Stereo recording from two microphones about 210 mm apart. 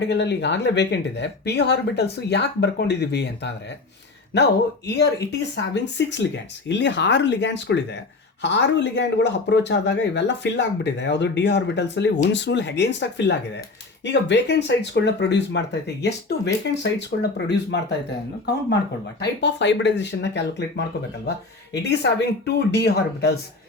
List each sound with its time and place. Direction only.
0.0 s speech: 55° left (ahead or behind)
19.2 s speech: 55° left (ahead or behind)